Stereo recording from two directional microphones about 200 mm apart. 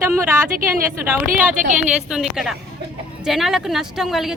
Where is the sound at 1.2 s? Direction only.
40° right (ahead or behind).